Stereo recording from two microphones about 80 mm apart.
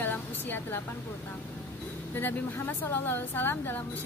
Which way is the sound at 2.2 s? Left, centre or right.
Left.